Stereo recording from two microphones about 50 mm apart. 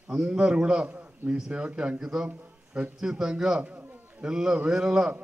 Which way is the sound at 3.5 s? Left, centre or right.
Right.